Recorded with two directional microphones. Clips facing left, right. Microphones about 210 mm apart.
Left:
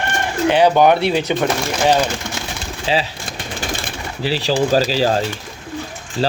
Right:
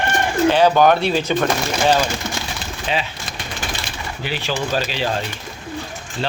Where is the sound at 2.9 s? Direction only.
30° left (ahead or behind).